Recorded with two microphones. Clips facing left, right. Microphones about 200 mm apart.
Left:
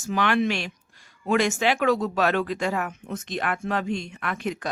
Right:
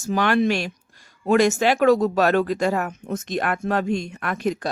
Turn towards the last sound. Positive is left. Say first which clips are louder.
# right 5 dB
turn(degrees=-40)  # may be behind; listen again after turning